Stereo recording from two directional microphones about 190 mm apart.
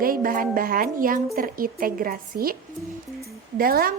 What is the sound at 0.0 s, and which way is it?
Speech, 50° right (ahead or behind).